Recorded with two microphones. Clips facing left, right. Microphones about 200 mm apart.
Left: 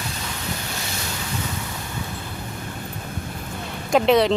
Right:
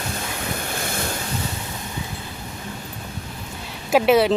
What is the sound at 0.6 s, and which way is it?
Waves, 55° right (ahead or behind).